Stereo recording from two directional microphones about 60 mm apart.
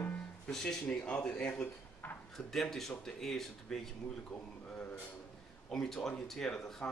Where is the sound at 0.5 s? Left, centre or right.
Centre.